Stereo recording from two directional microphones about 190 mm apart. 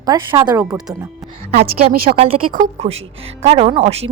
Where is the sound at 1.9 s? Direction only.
50° right (ahead or behind).